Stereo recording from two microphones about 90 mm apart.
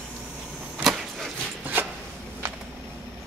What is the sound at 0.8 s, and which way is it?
Vehicle, centre (ahead or behind).